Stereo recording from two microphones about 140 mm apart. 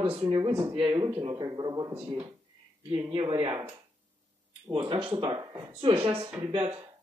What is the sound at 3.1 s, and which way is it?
Speech, 35° right (ahead or behind).